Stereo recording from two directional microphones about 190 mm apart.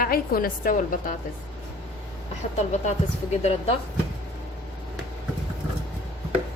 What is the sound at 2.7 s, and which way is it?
Speech, 35° left (ahead or behind).